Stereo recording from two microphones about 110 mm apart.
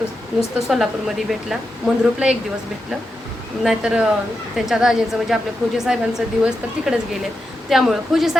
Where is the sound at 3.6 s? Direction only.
5° right (ahead or behind).